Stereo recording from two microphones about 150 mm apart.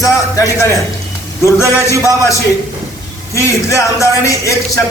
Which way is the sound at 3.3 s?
20° left (ahead or behind).